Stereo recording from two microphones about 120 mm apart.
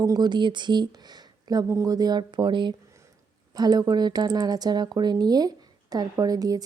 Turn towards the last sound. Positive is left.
turn(degrees=-30)  # may be behind; listen again after turning